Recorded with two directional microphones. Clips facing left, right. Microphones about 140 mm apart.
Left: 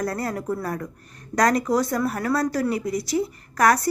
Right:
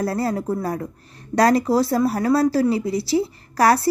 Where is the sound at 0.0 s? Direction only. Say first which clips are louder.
Right 4 dB; 30° right (ahead or behind).